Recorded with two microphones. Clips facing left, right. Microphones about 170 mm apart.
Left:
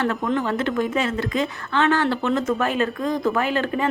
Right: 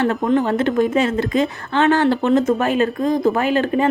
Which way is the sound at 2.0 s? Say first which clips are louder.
Right 6 dB; 30° right (ahead or behind).